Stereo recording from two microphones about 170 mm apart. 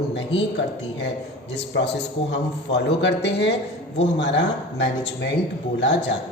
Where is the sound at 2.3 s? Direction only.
90° left.